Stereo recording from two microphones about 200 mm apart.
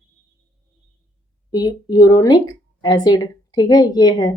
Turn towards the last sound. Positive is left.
turn(degrees=20)  # may be behind; listen again after turning